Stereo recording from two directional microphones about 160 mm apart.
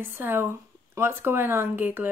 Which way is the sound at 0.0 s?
15° right (ahead or behind).